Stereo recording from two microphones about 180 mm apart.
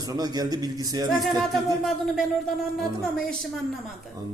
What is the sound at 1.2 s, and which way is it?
A woman's voice, centre (ahead or behind).